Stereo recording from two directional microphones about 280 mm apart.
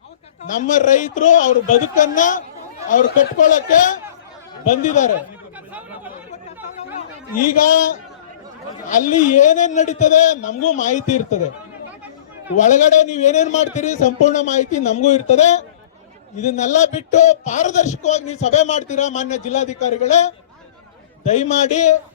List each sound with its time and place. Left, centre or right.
0.6 s speech: left
7.7 s speech: left
12.5 s speech: left